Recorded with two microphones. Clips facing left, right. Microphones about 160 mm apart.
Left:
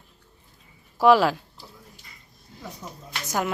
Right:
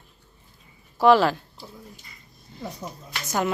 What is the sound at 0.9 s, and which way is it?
Speech, 5° left (ahead or behind).